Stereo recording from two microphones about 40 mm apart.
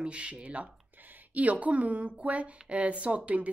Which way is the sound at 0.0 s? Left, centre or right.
Right.